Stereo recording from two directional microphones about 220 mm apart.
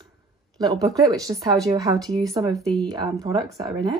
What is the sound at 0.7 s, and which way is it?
Speech, 15° right (ahead or behind).